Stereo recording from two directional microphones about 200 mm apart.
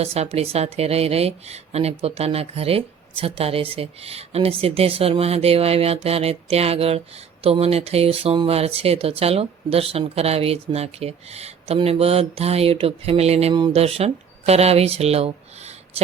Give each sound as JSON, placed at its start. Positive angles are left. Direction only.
{"t": 0.0, "sound": "speech", "side_deg": -30}